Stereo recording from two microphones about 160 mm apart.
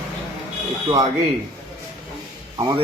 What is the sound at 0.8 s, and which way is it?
Speech, 25° right (ahead or behind).